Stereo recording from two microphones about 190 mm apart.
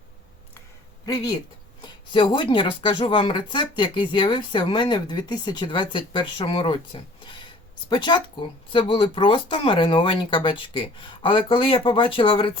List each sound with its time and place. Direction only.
1.0 s speech: 20° left (ahead or behind)